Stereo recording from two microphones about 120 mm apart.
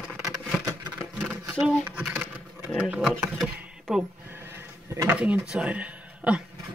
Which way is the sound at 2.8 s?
10° right (ahead or behind).